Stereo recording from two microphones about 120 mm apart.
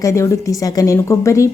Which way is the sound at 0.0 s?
25° left (ahead or behind).